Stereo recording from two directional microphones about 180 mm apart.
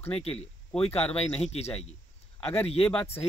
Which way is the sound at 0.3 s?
5° left (ahead or behind).